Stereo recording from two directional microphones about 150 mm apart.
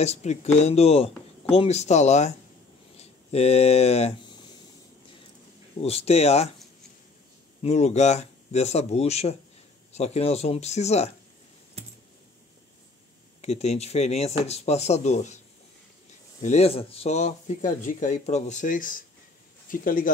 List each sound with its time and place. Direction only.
0.0 s speech: 45° left (ahead or behind)
5.8 s speech: 40° left (ahead or behind)
7.6 s speech: 50° left (ahead or behind)
13.4 s speech: 45° left (ahead or behind)
16.3 s speech: 45° left (ahead or behind); by 20.1 s 65° left (ahead or behind)